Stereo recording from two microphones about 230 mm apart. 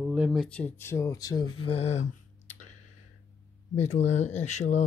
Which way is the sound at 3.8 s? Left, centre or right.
Left.